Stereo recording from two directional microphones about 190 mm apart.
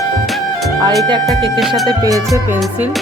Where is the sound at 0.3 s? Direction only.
Centre (ahead or behind).